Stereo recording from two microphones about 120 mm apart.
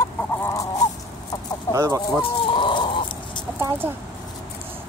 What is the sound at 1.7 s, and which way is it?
Speech, 30° right (ahead or behind).